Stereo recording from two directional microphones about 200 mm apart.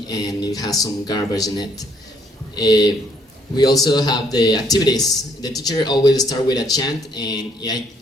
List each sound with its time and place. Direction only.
0.1 s a man's voice: 20° left (ahead or behind)